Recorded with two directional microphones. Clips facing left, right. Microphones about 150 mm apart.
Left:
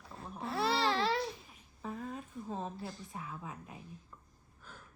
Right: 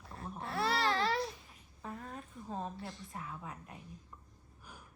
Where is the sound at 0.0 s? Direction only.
Centre (ahead or behind).